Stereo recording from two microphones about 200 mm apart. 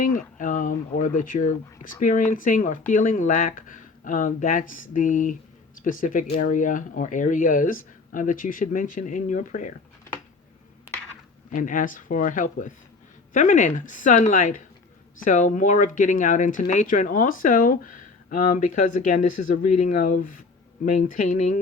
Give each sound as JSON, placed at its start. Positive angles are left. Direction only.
{"t": 0.0, "sound": "speech", "side_deg": 40}
{"t": 11.5, "sound": "speech", "side_deg": 40}